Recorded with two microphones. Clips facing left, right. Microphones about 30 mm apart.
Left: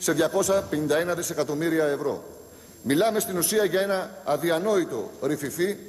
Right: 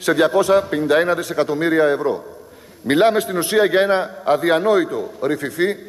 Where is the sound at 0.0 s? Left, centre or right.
Right.